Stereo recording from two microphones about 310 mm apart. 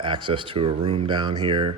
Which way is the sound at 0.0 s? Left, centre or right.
Centre.